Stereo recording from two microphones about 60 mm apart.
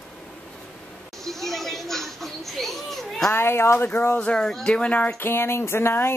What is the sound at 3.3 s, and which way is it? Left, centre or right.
Speech, left.